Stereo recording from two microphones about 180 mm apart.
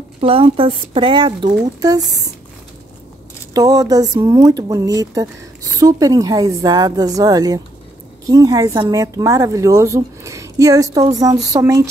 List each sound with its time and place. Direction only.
0.2 s speech: 30° right (ahead or behind)
3.5 s speech: 20° right (ahead or behind)
11.4 s a sound: 20° right (ahead or behind)